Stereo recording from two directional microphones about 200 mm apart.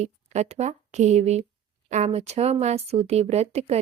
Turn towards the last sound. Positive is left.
turn(degrees=-30)  # may be behind; listen again after turning